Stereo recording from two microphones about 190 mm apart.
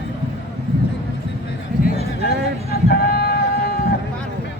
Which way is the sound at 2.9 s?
55° left (ahead or behind).